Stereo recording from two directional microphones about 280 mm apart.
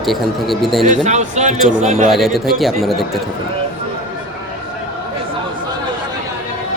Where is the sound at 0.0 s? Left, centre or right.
Centre.